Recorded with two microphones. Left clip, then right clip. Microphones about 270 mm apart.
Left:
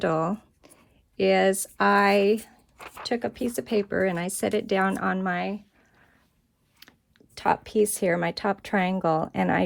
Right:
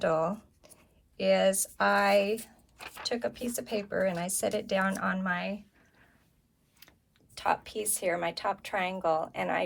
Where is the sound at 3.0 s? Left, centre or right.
Left.